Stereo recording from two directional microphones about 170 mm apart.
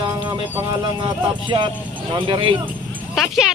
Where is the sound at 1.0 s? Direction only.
30° right (ahead or behind).